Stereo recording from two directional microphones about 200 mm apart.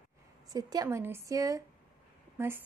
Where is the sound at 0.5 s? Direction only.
20° right (ahead or behind).